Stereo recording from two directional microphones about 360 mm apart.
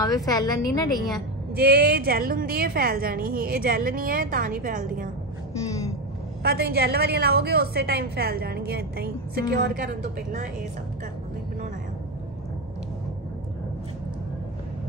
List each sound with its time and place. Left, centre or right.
0.0 s a woman's voice: centre
1.5 s a woman's voice: right
6.4 s a woman's voice: right